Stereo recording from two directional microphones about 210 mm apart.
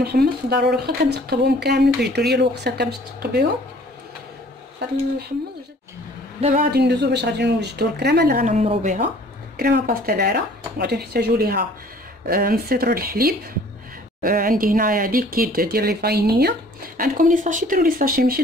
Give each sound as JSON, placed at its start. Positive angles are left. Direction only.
{"t": 0.0, "sound": "speech", "side_deg": -50}
{"t": 4.8, "sound": "speech", "side_deg": -50}
{"t": 6.7, "sound": "speech", "side_deg": -50}
{"t": 8.5, "sound": "a woman's voice", "side_deg": -35}